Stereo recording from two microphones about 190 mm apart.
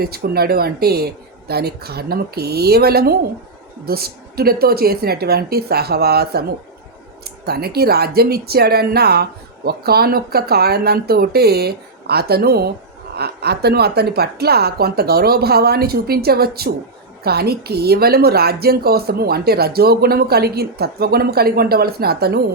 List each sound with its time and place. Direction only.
0.0 s a woman's voice: 55° right (ahead or behind)